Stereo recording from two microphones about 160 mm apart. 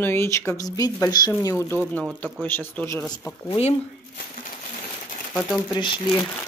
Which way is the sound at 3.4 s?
40° left (ahead or behind).